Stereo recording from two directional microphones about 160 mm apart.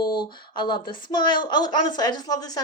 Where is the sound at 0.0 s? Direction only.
30° left (ahead or behind).